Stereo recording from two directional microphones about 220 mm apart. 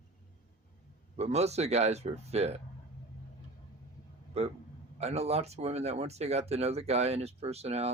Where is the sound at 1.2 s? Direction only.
30° right (ahead or behind).